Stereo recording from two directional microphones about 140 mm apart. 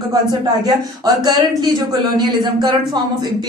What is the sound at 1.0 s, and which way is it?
Speech, 30° right (ahead or behind).